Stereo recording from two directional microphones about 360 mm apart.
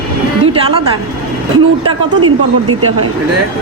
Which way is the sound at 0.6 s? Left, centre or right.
Centre.